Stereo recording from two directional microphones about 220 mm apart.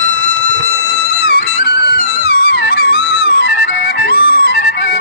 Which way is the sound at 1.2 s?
45° left (ahead or behind).